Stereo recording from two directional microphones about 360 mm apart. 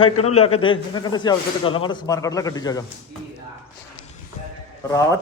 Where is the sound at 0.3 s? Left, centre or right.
Centre.